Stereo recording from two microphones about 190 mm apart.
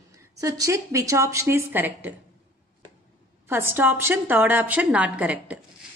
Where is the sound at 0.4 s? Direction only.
15° right (ahead or behind).